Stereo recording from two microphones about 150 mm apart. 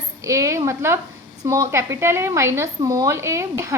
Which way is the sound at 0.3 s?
20° right (ahead or behind).